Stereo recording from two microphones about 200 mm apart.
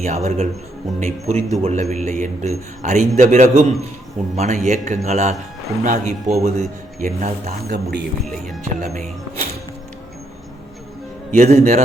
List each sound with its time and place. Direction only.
0.0 s a man's voice: 35° right (ahead or behind)
7.7 s speech: 55° right (ahead or behind)
8.6 s a man's voice: 35° right (ahead or behind)
11.3 s a man's voice: 40° right (ahead or behind)